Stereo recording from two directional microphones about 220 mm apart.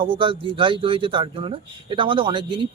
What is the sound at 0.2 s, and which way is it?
Speech, 25° right (ahead or behind).